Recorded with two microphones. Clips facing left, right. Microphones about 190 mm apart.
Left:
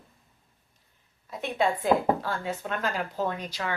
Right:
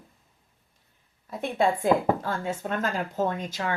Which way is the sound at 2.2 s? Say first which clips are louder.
Right 2 dB; 45° right (ahead or behind).